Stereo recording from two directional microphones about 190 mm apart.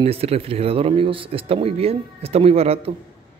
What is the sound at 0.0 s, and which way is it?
Speech, 30° right (ahead or behind).